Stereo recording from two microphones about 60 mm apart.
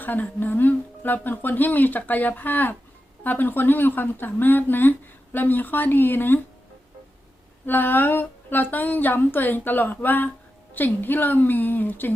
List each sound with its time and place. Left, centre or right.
0.0 s speech: left
7.7 s speech: left